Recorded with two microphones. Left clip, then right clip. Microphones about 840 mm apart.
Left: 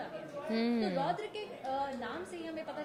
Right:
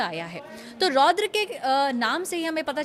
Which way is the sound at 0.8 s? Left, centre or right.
Right.